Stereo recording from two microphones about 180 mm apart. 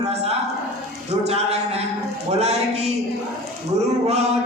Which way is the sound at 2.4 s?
35° right (ahead or behind).